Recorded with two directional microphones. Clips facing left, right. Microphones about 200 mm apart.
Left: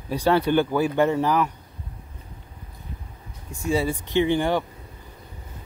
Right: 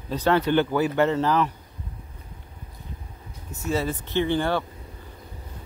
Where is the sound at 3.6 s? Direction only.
10° left (ahead or behind).